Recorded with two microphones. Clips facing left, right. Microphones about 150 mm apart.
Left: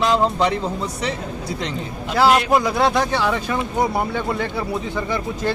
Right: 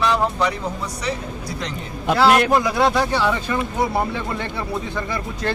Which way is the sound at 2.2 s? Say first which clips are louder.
Even; centre (ahead or behind).